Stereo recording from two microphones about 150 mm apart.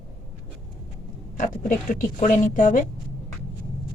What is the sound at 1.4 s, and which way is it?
Speech, 60° left (ahead or behind).